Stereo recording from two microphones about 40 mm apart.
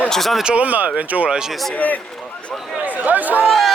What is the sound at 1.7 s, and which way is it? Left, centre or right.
Speech, left.